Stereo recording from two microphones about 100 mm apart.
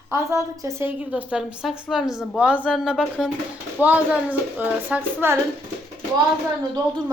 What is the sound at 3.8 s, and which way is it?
A woman's voice, 15° right (ahead or behind).